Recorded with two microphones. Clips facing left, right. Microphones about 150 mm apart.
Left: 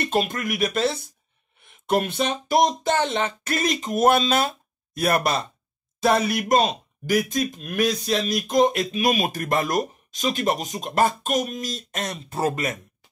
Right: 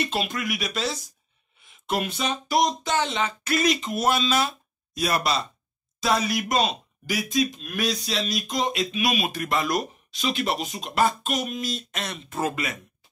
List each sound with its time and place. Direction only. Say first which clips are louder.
0.0 s speech: left 4 dB; 50° left (ahead or behind)